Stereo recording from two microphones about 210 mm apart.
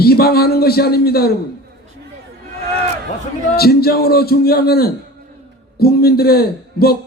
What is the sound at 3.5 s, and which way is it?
A man's voice, 45° left (ahead or behind).